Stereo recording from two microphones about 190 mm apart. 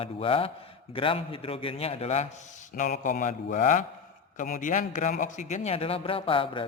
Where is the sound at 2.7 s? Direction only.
45° left (ahead or behind).